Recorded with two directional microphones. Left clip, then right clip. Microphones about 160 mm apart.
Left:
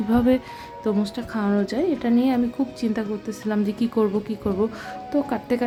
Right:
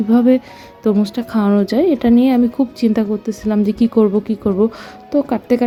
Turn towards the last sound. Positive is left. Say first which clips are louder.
# right 7 dB
turn(degrees=-30)  # may be behind; listen again after turning